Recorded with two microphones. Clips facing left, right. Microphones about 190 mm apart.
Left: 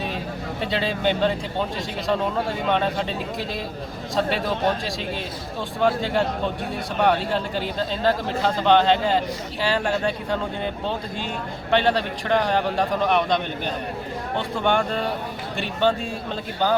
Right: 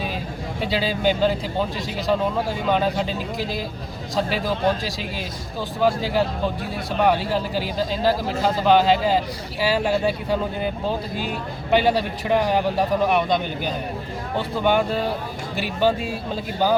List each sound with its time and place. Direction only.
0.6 s speech: centre (ahead or behind)
5.8 s speech: 5° right (ahead or behind)